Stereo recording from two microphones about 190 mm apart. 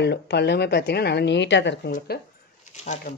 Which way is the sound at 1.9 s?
55° left (ahead or behind).